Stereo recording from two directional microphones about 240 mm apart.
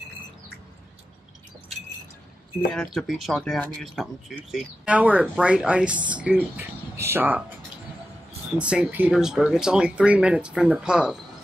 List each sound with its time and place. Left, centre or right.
2.7 s speech: centre
8.5 s speech: centre